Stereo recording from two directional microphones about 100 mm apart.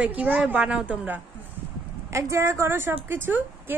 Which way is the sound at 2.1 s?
30° right (ahead or behind).